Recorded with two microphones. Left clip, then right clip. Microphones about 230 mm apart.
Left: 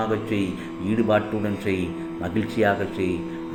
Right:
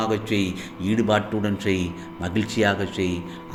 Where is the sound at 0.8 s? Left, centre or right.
Right.